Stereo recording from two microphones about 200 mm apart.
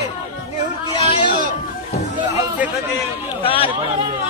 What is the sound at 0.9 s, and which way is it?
Speech, 25° left (ahead or behind).